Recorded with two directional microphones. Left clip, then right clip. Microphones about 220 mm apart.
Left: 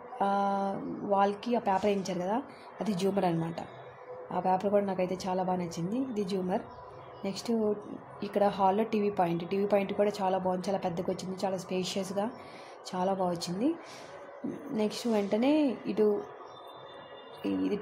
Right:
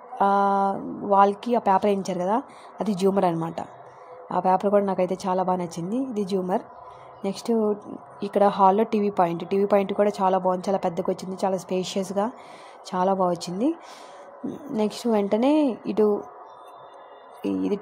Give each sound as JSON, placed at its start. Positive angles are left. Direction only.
{"t": 0.2, "sound": "a woman's voice", "side_deg": -30}
{"t": 17.4, "sound": "speech", "side_deg": -30}